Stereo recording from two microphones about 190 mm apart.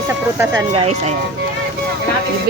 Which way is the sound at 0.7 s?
35° right (ahead or behind).